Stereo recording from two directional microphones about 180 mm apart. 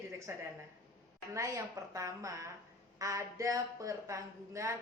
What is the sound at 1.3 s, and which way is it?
A woman's voice, 15° right (ahead or behind).